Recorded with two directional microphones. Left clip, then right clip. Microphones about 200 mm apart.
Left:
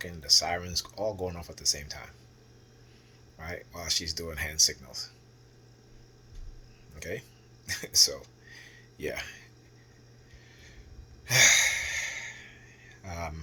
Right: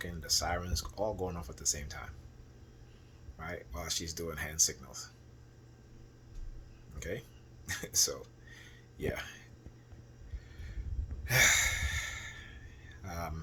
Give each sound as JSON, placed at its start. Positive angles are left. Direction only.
{"t": 0.0, "sound": "speech", "side_deg": -20}
{"t": 3.3, "sound": "speech", "side_deg": -15}
{"t": 7.0, "sound": "speech", "side_deg": -20}
{"t": 8.7, "sound": "a sound", "side_deg": -15}
{"t": 11.3, "sound": "a sound", "side_deg": -15}
{"t": 13.0, "sound": "speech", "side_deg": -15}